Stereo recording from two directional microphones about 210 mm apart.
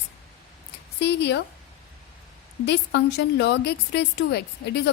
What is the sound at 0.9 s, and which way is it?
Speech, 55° left (ahead or behind).